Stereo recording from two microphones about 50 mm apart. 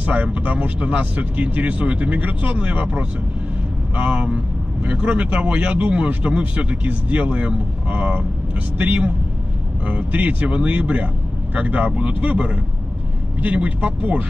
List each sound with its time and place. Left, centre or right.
0.0 s speech: right